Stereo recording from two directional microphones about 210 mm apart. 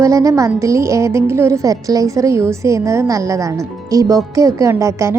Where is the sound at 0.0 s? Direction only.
15° right (ahead or behind).